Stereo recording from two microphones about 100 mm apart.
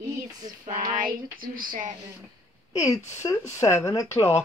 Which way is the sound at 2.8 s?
35° left (ahead or behind).